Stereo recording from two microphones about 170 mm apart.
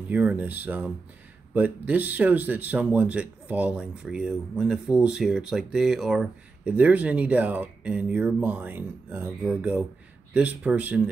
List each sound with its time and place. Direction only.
0.1 s speech: 10° right (ahead or behind)